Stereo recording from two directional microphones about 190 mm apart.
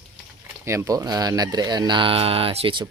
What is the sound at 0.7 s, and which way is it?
A man's voice, 15° right (ahead or behind).